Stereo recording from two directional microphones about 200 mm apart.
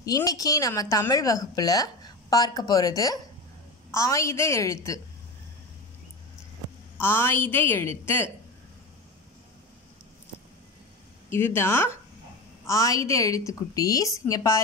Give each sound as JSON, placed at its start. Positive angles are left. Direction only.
{"t": 0.0, "sound": "a woman's voice", "side_deg": 20}
{"t": 7.0, "sound": "a woman's voice", "side_deg": 10}
{"t": 11.2, "sound": "a woman's voice", "side_deg": 10}